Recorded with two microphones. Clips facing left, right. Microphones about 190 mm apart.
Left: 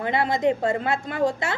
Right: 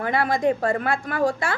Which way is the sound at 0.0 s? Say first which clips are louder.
Even; 20° left (ahead or behind).